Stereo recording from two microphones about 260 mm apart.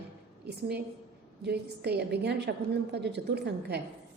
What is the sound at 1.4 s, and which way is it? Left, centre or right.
A woman's voice, right.